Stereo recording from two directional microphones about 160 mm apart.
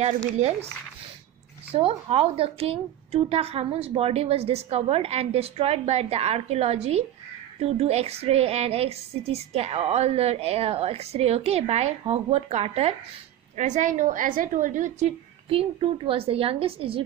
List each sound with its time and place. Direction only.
0.0 s a woman's voice: 40° right (ahead or behind)
1.7 s a woman's voice: 35° right (ahead or behind)
13.6 s a woman's voice: 50° right (ahead or behind)